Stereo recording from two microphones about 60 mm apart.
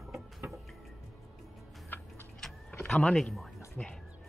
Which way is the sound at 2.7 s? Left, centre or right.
Left.